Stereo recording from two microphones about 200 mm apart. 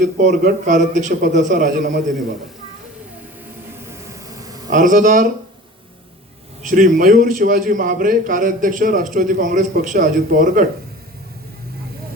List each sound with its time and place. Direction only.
0.0 s a man's voice: 40° right (ahead or behind)
4.1 s a sound: 20° right (ahead or behind)
4.7 s a man's voice: 40° right (ahead or behind)
6.6 s a man's voice: 40° right (ahead or behind)